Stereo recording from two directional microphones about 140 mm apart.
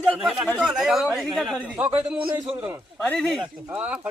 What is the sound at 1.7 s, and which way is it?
Speech, 10° right (ahead or behind).